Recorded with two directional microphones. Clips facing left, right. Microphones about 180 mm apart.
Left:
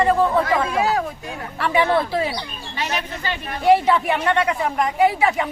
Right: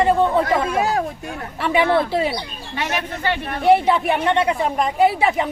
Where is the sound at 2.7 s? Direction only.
55° right (ahead or behind).